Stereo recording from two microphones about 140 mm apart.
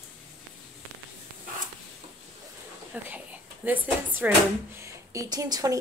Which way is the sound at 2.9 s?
10° right (ahead or behind).